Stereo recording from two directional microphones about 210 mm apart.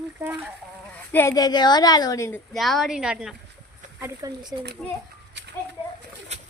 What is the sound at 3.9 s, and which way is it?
Speech, 15° right (ahead or behind).